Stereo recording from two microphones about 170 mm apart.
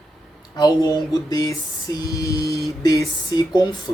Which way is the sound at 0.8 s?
15° right (ahead or behind).